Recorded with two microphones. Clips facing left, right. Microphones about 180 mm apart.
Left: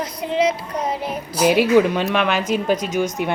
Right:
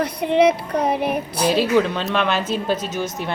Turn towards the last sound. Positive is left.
turn(degrees=15)  # may be behind; listen again after turning